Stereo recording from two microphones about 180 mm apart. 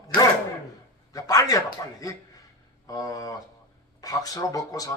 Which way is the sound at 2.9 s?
20° left (ahead or behind).